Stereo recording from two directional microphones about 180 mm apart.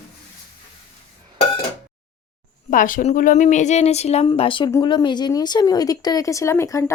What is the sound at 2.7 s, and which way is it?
Speech, 50° left (ahead or behind).